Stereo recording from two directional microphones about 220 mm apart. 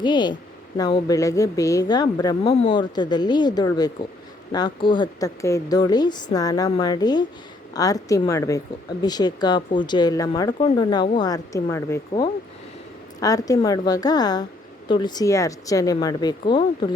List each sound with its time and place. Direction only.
0.0 s a woman's voice: 20° left (ahead or behind)